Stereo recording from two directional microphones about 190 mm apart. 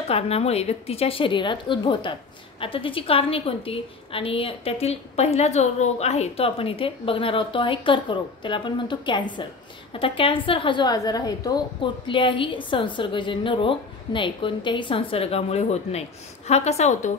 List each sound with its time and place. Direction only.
0.1 s a woman's voice: 30° left (ahead or behind)